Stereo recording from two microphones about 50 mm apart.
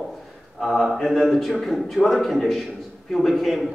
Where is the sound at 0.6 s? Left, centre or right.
Centre.